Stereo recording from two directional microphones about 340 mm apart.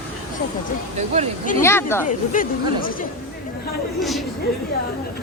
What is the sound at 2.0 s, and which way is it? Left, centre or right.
Speech, left.